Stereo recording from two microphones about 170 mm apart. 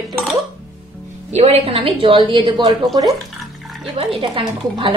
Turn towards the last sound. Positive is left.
turn(degrees=-30)  # may be behind; listen again after turning